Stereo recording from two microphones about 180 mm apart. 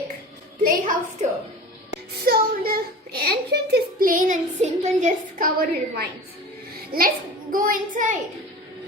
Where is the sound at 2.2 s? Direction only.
55° right (ahead or behind).